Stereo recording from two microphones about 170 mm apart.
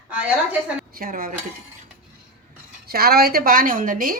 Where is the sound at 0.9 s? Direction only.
55° right (ahead or behind).